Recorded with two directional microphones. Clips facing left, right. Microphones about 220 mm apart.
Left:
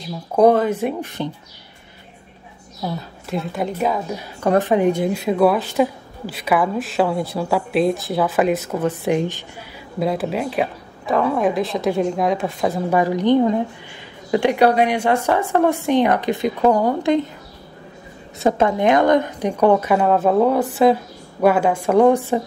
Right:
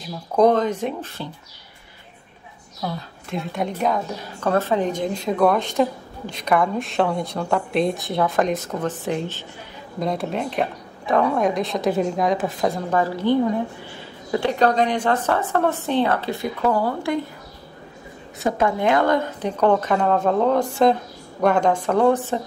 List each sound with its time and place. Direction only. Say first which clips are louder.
0.4 s a woman's voice: left 3 dB; 10° left (ahead or behind)
3.3 s a woman's voice: left 2 dB; 5° left (ahead or behind)
4.5 s a woman's voice: left 4 dB; 15° left (ahead or behind)
13.0 s a woman's voice: left 4 dB; 20° left (ahead or behind)
18.4 s a woman's voice: left 4 dB; 20° left (ahead or behind)